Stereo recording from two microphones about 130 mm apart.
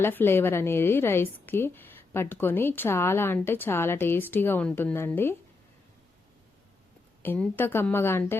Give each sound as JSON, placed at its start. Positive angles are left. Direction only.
{"t": 0.0, "sound": "a woman's voice", "side_deg": 15}
{"t": 7.2, "sound": "a woman's voice", "side_deg": 10}